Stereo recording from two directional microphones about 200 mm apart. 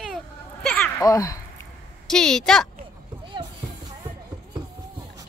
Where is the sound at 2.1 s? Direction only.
5° left (ahead or behind).